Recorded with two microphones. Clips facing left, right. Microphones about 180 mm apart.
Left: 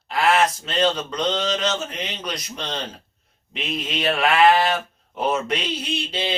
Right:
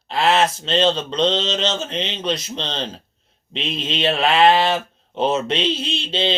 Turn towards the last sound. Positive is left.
turn(degrees=-25)  # may be behind; listen again after turning